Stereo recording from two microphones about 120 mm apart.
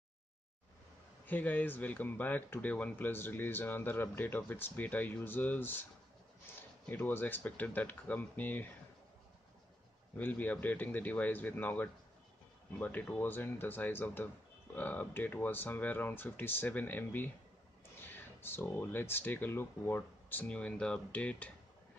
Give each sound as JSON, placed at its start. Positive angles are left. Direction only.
{"t": 1.2, "sound": "speech", "side_deg": 15}
{"t": 6.5, "sound": "a sound", "side_deg": 20}
{"t": 6.9, "sound": "speech", "side_deg": 15}
{"t": 10.1, "sound": "speech", "side_deg": 15}